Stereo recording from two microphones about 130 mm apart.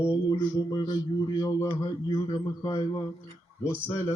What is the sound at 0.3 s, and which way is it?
Mantra, 35° left (ahead or behind).